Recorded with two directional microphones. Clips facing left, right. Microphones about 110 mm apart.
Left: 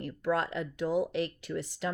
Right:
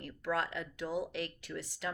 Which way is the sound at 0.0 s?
30° left (ahead or behind).